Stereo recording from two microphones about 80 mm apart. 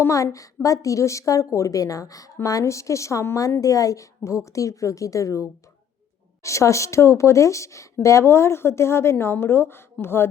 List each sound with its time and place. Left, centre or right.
0.0 s a woman's voice: left